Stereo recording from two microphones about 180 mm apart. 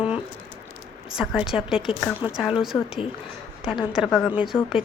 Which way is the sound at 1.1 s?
5° right (ahead or behind).